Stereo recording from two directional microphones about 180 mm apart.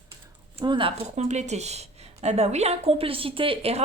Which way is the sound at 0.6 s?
25° right (ahead or behind).